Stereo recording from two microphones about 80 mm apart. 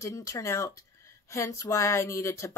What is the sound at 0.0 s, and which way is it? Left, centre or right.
Speech, left.